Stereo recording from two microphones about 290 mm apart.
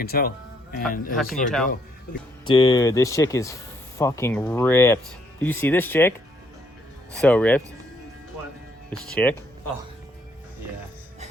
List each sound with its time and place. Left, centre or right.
0.0 s speech: left
1.1 s speech: centre
2.5 s speech: centre
8.9 s speech: centre